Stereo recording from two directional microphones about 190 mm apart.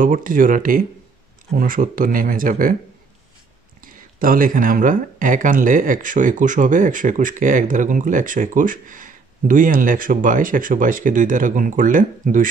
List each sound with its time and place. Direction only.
0.0 s speech: 45° right (ahead or behind)
3.8 s speech: 45° right (ahead or behind)